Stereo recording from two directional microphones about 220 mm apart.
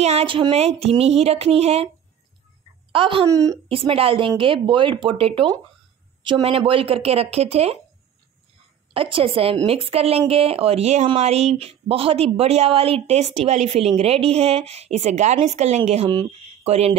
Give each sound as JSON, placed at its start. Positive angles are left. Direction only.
{"t": 0.0, "sound": "a woman's voice", "side_deg": -25}
{"t": 2.9, "sound": "a woman's voice", "side_deg": -25}
{"t": 3.6, "sound": "a woman's voice", "side_deg": -25}
{"t": 8.9, "sound": "a woman's voice", "side_deg": -25}